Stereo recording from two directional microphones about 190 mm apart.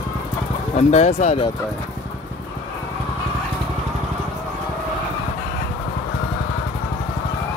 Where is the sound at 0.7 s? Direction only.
35° left (ahead or behind).